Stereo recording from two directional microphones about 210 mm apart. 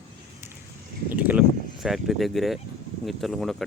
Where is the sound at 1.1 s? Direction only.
5° right (ahead or behind).